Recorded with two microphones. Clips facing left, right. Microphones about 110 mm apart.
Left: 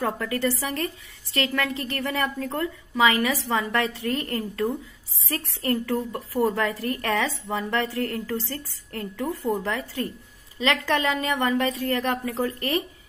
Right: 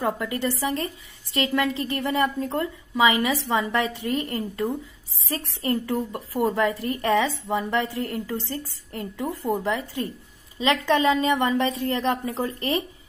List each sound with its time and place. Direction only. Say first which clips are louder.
0.0 s a woman's voice: even; 20° right (ahead or behind)